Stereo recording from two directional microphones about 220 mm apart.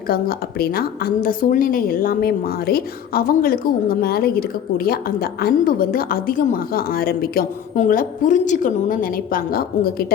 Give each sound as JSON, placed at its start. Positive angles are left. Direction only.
{"t": 0.1, "sound": "a woman's voice", "side_deg": 40}